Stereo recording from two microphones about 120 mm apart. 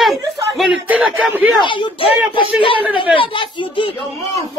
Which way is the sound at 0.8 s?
15° right (ahead or behind).